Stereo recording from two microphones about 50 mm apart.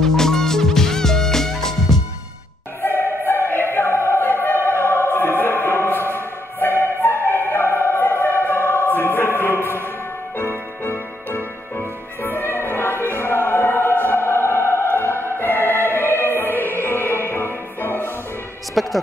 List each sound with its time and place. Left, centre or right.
0.0 s music: centre
2.8 s choir: left
3.7 s opera: left
10.3 s music: left
18.8 s a sound: centre